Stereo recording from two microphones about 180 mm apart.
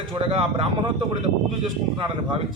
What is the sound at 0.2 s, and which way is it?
Speech, 30° right (ahead or behind).